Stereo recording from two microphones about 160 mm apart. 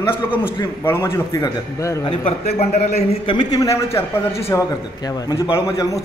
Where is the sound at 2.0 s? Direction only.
35° left (ahead or behind).